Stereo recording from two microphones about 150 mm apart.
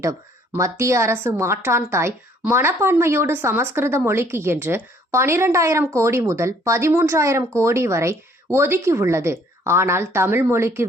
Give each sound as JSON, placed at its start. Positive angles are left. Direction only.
{"t": 0.0, "sound": "speech", "side_deg": -20}